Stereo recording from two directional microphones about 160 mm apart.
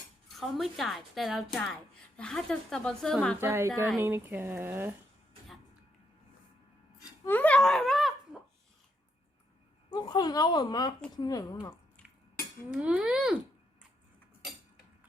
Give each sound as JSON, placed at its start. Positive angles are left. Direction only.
{"t": 0.3, "sound": "a woman's voice", "side_deg": 0}
{"t": 3.4, "sound": "speech", "side_deg": -15}
{"t": 7.3, "sound": "speech", "side_deg": 10}
{"t": 9.9, "sound": "speech", "side_deg": 30}
{"t": 12.7, "sound": "speech", "side_deg": -10}